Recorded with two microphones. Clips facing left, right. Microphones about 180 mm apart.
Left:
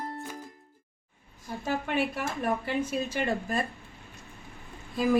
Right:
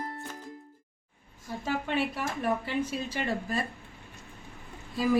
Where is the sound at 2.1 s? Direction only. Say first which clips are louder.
Even; 50° left (ahead or behind).